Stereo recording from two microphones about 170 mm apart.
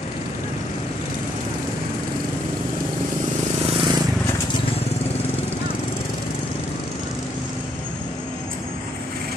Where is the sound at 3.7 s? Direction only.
30° right (ahead or behind).